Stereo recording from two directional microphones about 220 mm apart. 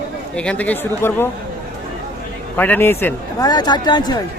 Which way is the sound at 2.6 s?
10° left (ahead or behind).